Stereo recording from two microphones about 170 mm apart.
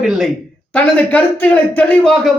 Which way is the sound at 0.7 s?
10° left (ahead or behind).